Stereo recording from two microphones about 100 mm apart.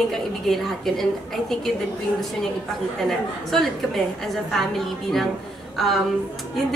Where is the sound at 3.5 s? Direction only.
Centre (ahead or behind).